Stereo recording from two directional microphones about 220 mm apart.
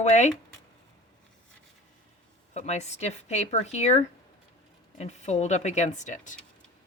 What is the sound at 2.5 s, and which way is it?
Speech, 30° left (ahead or behind).